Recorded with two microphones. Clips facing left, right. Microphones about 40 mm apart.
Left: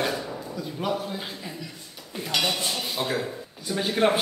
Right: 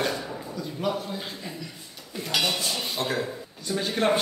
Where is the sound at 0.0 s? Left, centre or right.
Centre.